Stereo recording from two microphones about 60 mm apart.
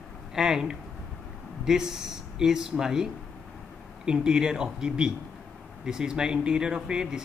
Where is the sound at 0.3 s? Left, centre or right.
Centre.